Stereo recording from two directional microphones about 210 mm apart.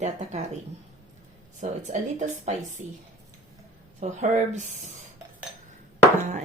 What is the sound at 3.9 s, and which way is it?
Speech, 35° right (ahead or behind).